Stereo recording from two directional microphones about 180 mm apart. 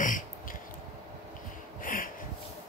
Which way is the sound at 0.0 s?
50° left (ahead or behind).